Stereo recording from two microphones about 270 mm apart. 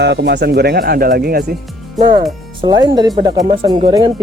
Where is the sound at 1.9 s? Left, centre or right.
Centre.